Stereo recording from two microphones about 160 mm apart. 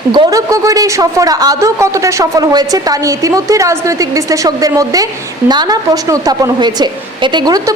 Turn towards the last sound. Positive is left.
turn(degrees=-25)  # may be behind; listen again after turning